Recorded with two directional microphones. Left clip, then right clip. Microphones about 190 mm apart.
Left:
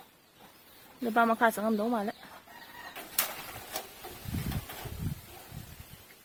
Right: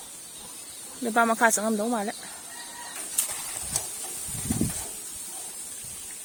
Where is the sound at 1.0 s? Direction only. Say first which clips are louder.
Right 4 dB; 20° right (ahead or behind).